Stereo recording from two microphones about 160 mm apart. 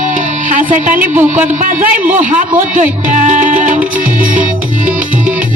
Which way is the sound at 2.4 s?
50° right (ahead or behind).